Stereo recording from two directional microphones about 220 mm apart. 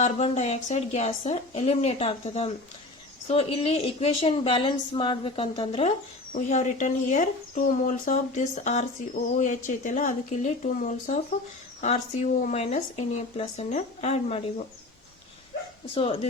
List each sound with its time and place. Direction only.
0.0 s speech: 30° left (ahead or behind)